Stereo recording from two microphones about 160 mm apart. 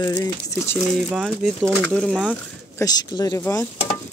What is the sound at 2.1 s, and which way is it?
Speech, 5° right (ahead or behind).